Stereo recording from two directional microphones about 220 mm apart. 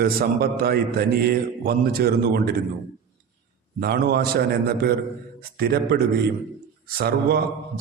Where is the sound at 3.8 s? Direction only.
45° right (ahead or behind).